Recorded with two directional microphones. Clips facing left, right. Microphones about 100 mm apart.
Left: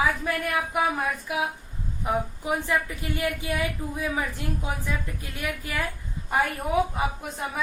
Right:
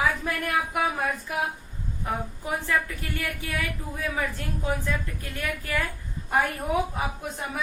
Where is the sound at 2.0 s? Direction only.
15° left (ahead or behind).